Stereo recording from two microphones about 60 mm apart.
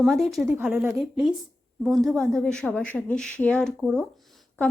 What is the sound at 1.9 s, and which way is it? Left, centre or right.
Speech, centre.